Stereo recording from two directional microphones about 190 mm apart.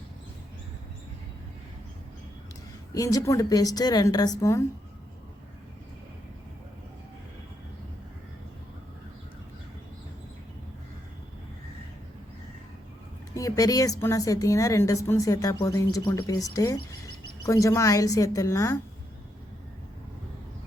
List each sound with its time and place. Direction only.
2.9 s a woman's voice: 20° left (ahead or behind)
13.3 s a woman's voice: 20° left (ahead or behind)